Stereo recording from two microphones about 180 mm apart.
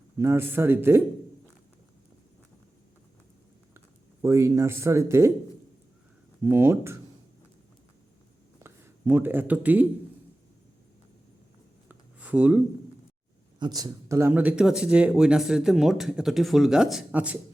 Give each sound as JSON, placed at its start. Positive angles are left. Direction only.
{"t": 0.2, "sound": "speech", "side_deg": -15}
{"t": 3.8, "sound": "speech", "side_deg": -15}
{"t": 6.4, "sound": "speech", "side_deg": -15}
{"t": 8.6, "sound": "speech", "side_deg": -15}
{"t": 11.9, "sound": "a sound", "side_deg": -10}
{"t": 13.6, "sound": "speech", "side_deg": -20}